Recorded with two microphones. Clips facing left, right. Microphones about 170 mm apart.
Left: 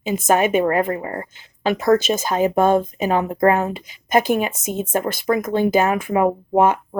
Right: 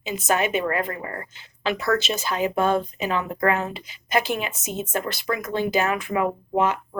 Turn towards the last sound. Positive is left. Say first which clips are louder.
# left 6 dB
turn(degrees=50)  # may be behind; listen again after turning